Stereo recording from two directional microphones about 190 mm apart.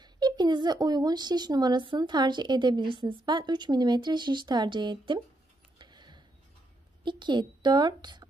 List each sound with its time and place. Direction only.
0.0 s speech: 20° right (ahead or behind)
5.8 s a sound: 25° right (ahead or behind)
7.0 s a woman's voice: 25° right (ahead or behind)